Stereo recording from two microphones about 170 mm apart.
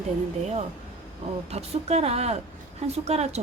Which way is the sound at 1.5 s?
40° right (ahead or behind).